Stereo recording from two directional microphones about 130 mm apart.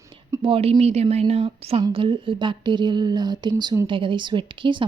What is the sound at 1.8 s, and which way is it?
A woman's voice, 40° right (ahead or behind).